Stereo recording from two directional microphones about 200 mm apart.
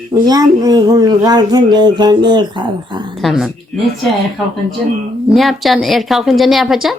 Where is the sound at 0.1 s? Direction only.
20° right (ahead or behind).